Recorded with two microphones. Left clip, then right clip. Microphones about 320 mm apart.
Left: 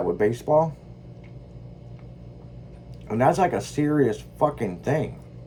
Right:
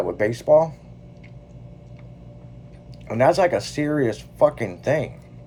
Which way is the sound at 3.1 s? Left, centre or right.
Right.